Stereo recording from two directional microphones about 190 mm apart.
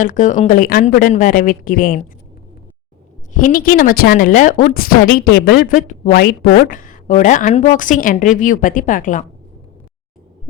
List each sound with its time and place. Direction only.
0.0 s a woman's voice: 40° left (ahead or behind)
3.3 s a woman's voice: 45° left (ahead or behind)